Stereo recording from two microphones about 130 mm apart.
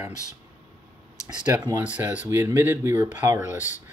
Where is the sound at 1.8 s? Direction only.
10° right (ahead or behind).